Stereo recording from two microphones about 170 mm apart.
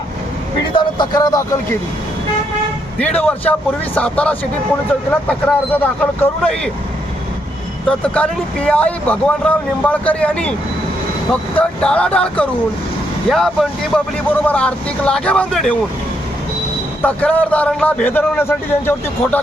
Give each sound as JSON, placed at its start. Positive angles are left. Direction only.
{"t": 0.7, "sound": "speech", "side_deg": 25}
{"t": 3.0, "sound": "speech", "side_deg": 10}
{"t": 7.9, "sound": "speech", "side_deg": 5}
{"t": 17.0, "sound": "speech", "side_deg": 10}